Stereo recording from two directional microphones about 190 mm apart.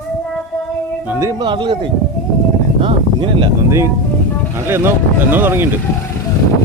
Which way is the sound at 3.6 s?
15° right (ahead or behind).